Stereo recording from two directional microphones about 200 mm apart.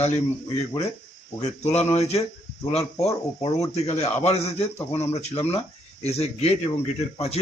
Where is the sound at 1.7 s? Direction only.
30° left (ahead or behind).